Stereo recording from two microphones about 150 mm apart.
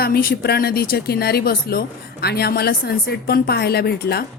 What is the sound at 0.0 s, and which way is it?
A woman's voice, 85° left.